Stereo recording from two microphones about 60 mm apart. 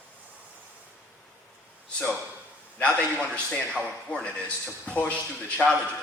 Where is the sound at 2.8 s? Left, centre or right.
Left.